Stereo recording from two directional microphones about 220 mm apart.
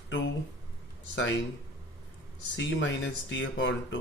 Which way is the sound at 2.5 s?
60° left (ahead or behind).